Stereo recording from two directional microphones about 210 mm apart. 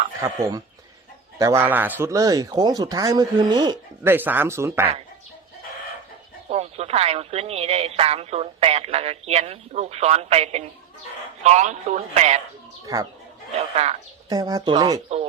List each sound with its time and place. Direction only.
0.2 s speech: 15° right (ahead or behind)
6.5 s speech: 30° right (ahead or behind)
12.8 s speech: 15° right (ahead or behind)
14.3 s speech: 15° right (ahead or behind)